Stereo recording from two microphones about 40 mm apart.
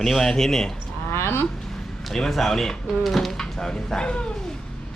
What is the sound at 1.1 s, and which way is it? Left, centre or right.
Speech, left.